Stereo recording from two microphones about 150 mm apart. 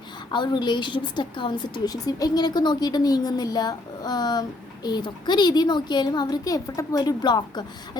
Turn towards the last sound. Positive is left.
turn(degrees=30)  # may be behind; listen again after turning